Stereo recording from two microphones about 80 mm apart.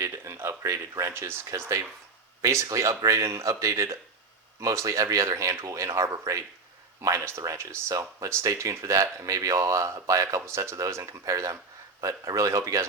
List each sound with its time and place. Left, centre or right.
0.0 s speech: right